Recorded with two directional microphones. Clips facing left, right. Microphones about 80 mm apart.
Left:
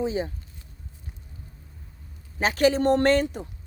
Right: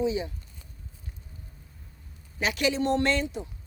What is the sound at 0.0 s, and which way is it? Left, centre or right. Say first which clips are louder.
Speech: left 1 dB; left.